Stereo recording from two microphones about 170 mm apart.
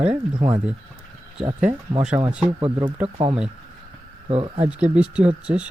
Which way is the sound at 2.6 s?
30° right (ahead or behind).